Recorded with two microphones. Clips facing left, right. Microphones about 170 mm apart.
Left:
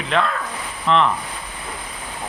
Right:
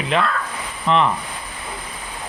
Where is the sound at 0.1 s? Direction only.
5° right (ahead or behind).